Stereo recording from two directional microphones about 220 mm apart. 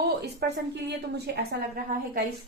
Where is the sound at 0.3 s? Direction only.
50° right (ahead or behind).